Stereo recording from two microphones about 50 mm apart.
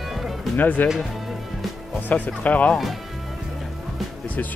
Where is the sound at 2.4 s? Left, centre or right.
Left.